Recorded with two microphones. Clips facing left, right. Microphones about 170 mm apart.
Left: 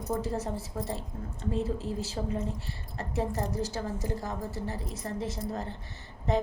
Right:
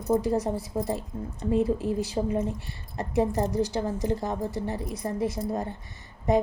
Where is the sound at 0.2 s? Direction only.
15° right (ahead or behind).